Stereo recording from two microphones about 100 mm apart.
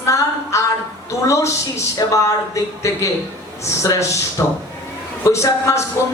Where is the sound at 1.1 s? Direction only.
30° left (ahead or behind).